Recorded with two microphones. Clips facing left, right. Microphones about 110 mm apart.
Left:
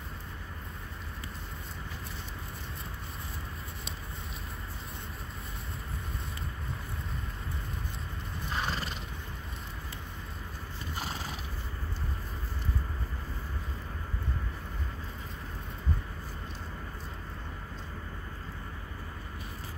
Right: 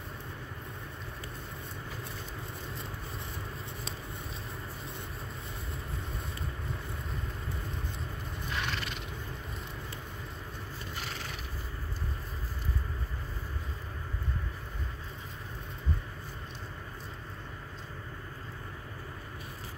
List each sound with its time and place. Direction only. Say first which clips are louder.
8.5 s neigh: left 2 dB; 35° left (ahead or behind)